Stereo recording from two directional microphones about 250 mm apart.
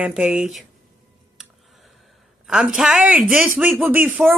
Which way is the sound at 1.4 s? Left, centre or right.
Centre.